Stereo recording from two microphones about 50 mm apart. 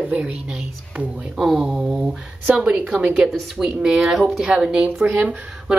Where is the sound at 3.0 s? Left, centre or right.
Right.